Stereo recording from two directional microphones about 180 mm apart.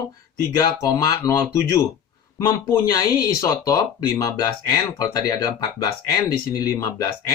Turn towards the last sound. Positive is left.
turn(degrees=20)  # may be behind; listen again after turning